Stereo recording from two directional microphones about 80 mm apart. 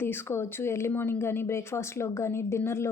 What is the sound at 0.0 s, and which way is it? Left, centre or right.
A woman's voice, left.